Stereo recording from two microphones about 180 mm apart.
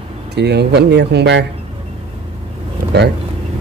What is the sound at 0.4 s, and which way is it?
Speech, 65° right (ahead or behind).